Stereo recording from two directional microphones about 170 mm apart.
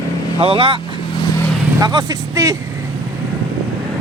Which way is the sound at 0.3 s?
30° right (ahead or behind).